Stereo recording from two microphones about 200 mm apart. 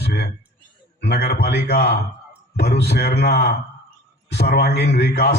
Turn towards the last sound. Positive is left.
turn(degrees=55)  # may be behind; listen again after turning